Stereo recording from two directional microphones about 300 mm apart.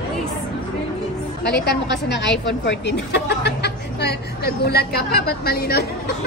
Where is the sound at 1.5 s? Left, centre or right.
Left.